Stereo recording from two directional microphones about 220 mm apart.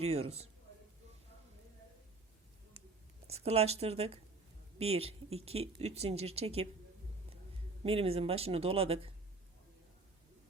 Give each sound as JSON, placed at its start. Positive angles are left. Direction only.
{"t": 0.0, "sound": "speech", "side_deg": -25}
{"t": 3.2, "sound": "speech", "side_deg": -30}
{"t": 7.9, "sound": "speech", "side_deg": -25}